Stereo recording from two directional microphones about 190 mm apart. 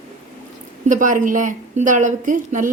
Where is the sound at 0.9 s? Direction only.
45° right (ahead or behind).